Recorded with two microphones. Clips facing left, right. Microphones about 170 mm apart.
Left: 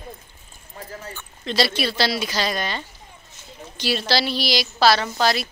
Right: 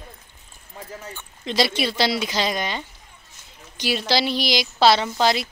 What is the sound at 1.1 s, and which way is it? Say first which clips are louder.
A woman's voice: even; 15° right (ahead or behind).